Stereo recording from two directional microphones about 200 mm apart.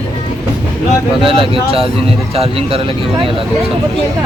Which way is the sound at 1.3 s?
25° right (ahead or behind).